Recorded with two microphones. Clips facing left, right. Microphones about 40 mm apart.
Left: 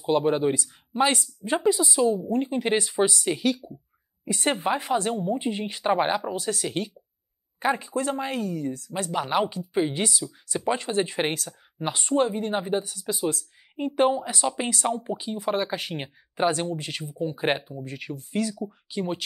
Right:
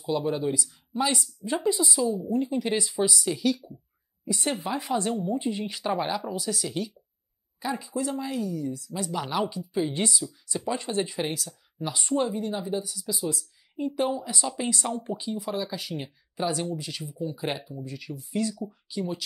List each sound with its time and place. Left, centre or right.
0.0 s speech: left